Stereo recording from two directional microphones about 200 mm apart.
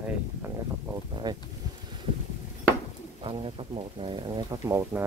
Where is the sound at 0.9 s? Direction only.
20° right (ahead or behind).